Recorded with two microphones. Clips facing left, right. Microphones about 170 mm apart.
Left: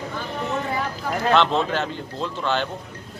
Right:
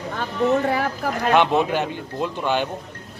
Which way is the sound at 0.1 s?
65° right (ahead or behind).